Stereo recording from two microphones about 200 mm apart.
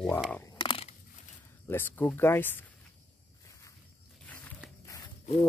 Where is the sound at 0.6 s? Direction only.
25° left (ahead or behind).